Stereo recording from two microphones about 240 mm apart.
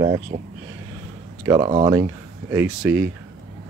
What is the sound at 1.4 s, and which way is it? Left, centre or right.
Speech, centre.